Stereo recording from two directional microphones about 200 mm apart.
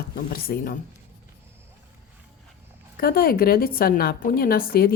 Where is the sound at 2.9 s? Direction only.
50° left (ahead or behind).